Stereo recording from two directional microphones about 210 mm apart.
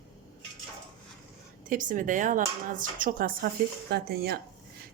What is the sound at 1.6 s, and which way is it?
A woman's voice, 40° right (ahead or behind).